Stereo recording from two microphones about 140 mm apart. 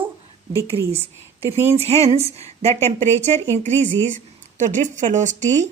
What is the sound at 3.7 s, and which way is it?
Speech, 15° left (ahead or behind).